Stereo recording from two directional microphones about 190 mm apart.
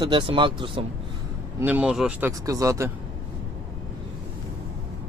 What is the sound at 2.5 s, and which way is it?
Speech, 15° right (ahead or behind).